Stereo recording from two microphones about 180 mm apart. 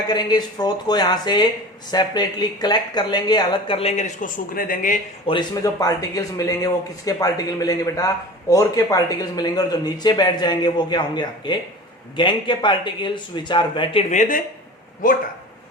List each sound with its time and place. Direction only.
0.1 s speech: 25° left (ahead or behind); by 4.9 s 50° left (ahead or behind)
5.2 s speech: 25° left (ahead or behind)
14.1 s speech: 45° left (ahead or behind)